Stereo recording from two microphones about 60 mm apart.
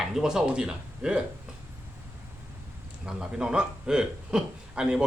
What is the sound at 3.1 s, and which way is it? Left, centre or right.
A man's voice, centre.